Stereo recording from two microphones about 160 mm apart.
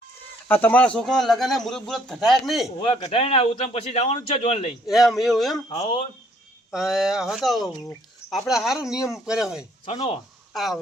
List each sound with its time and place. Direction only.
0.4 s speech: 10° left (ahead or behind)
2.8 s a man's voice: 35° left (ahead or behind)
4.9 s speech: centre (ahead or behind)
6.7 s speech: centre (ahead or behind)
9.8 s speech: 35° left (ahead or behind)
10.5 s speech: centre (ahead or behind)